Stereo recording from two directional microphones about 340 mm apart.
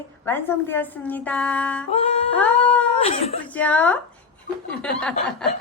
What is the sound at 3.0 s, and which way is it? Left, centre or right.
Speech, centre.